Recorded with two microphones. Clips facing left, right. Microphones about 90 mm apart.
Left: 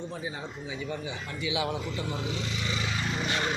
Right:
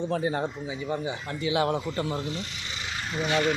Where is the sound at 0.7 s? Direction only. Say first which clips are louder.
Right 4 dB; 30° right (ahead or behind); by 2.0 s 50° right (ahead or behind).